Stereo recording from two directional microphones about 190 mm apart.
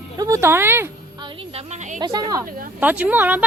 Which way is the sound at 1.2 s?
35° right (ahead or behind).